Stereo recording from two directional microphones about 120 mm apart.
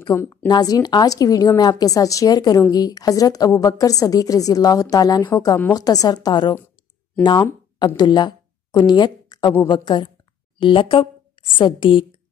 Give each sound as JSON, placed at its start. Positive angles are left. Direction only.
{"t": 0.1, "sound": "a woman's voice", "side_deg": 25}
{"t": 7.8, "sound": "a woman's voice", "side_deg": 35}